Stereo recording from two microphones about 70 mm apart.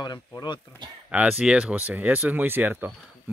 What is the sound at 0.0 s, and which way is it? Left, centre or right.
Speech, left.